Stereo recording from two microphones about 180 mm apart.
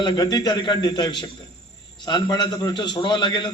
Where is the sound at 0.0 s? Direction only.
25° left (ahead or behind).